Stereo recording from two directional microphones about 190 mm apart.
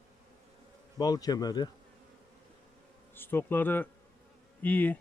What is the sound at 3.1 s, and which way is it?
Speech, 10° left (ahead or behind).